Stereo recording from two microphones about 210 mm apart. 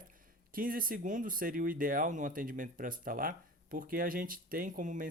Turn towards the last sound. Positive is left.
turn(degrees=-40)  # may be behind; listen again after turning